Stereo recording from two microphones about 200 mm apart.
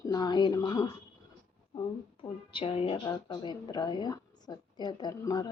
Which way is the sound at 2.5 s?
25° left (ahead or behind).